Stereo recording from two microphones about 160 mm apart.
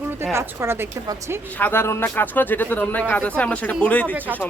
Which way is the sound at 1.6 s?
10° left (ahead or behind).